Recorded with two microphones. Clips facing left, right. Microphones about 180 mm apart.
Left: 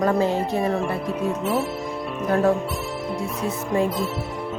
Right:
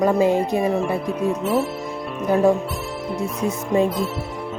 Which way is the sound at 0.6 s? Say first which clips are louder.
Right 3 dB; centre (ahead or behind).